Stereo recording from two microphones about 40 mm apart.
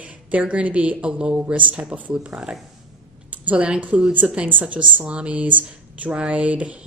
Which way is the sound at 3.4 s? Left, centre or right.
Right.